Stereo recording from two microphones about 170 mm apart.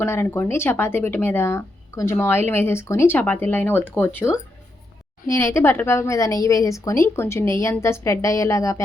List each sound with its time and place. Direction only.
0.0 s speech: 15° left (ahead or behind)